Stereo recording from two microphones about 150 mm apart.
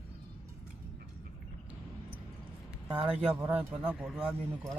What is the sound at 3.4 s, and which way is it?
Speech, 10° right (ahead or behind).